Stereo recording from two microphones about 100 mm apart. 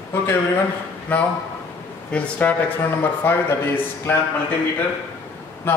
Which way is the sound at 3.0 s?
20° left (ahead or behind).